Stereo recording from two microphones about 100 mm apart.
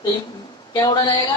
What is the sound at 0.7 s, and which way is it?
Speech, 45° left (ahead or behind).